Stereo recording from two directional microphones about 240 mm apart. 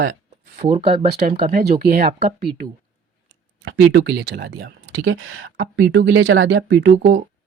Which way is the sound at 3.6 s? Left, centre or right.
Right.